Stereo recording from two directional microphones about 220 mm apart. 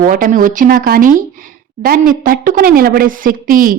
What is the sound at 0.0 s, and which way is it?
A woman's voice, 35° right (ahead or behind).